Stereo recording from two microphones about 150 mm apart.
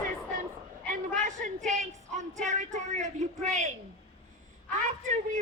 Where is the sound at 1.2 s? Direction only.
55° right (ahead or behind).